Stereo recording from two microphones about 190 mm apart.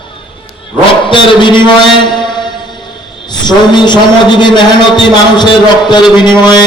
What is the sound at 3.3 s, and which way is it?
A man's voice, 25° left (ahead or behind).